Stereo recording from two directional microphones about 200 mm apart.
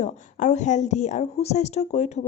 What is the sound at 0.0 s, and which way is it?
A woman's voice, 35° left (ahead or behind).